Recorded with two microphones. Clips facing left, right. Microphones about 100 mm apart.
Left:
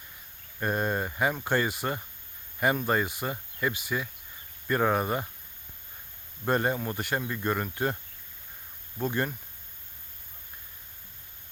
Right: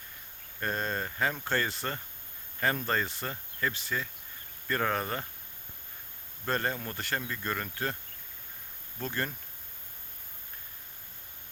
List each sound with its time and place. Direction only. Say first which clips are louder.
0.6 s speech: left 4 dB; 15° left (ahead or behind)
6.4 s speech: left 5 dB; 15° left (ahead or behind)
9.0 s speech: left 5 dB; 15° left (ahead or behind)